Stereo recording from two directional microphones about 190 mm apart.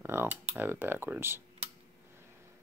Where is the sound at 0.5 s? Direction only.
10° right (ahead or behind).